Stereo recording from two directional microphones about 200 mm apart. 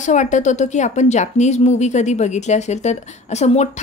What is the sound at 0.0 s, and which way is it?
Speech, 40° left (ahead or behind).